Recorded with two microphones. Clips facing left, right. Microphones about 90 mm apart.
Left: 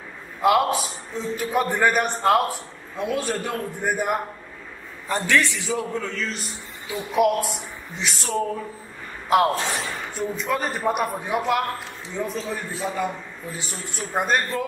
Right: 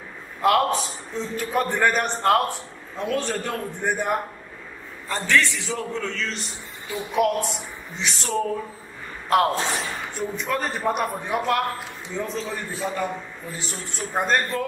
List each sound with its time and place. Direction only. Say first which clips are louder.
0.4 s a man's voice: left 1 dB; 5° left (ahead or behind)
5.6 s a man's voice: left 2 dB; 5° left (ahead or behind)
13.5 s a man's voice: left 1 dB; centre (ahead or behind)